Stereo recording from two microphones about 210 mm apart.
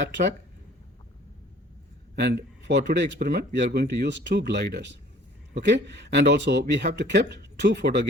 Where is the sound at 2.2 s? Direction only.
55° right (ahead or behind).